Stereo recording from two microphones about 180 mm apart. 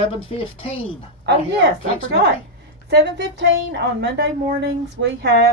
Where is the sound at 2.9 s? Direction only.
75° right (ahead or behind).